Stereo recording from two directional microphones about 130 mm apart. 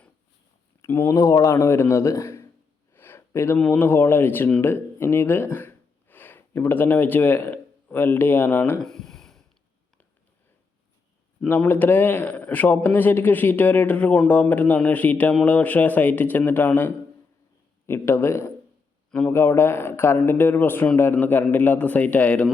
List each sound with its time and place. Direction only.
0.8 s a man's voice: 20° left (ahead or behind)
8.8 s a sound: 5° left (ahead or behind)
11.4 s a man's voice: 15° left (ahead or behind)